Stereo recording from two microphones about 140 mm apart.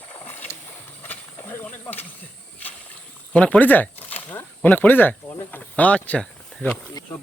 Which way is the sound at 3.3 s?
10° left (ahead or behind).